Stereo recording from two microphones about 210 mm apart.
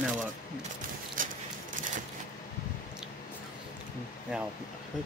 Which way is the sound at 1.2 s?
40° right (ahead or behind).